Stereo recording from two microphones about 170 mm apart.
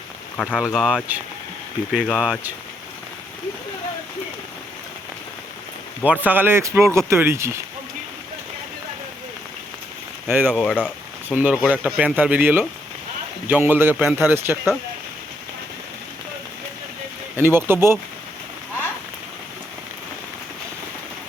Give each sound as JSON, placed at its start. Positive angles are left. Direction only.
{"t": 0.5, "sound": "speech", "side_deg": 0}
{"t": 6.2, "sound": "speech", "side_deg": -10}
{"t": 10.2, "sound": "speech", "side_deg": -10}
{"t": 10.5, "sound": "speech", "side_deg": 5}
{"t": 11.3, "sound": "speech", "side_deg": -5}
{"t": 17.3, "sound": "speech", "side_deg": -15}